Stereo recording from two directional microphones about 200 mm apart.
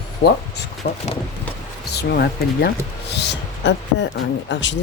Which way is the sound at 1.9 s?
55° left (ahead or behind).